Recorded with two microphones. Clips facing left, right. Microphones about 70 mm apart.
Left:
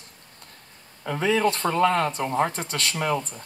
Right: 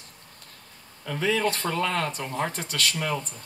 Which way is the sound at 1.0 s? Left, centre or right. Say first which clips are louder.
Left 3 dB; left.